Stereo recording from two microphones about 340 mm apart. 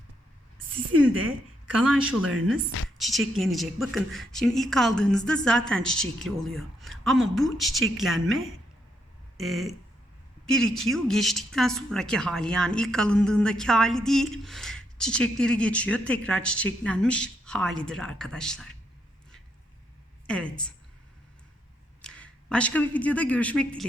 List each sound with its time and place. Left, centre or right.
0.9 s speech: right
1.8 s speech: centre
9.4 s speech: centre
20.2 s speech: centre
22.0 s speech: centre